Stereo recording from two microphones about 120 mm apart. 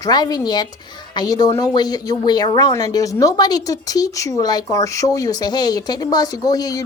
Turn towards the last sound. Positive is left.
turn(degrees=30)  # may be behind; listen again after turning